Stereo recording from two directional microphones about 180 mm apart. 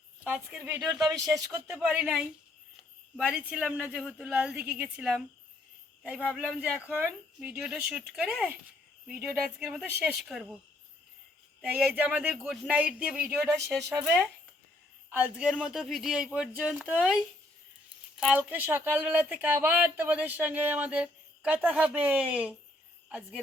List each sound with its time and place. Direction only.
0.3 s speech: 10° right (ahead or behind)
0.8 s speech: 20° right (ahead or behind); by 10.6 s centre (ahead or behind)
11.6 s speech: 10° right (ahead or behind)